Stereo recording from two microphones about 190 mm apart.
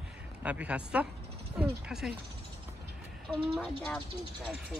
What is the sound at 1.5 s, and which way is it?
Mechanisms, 5° right (ahead or behind).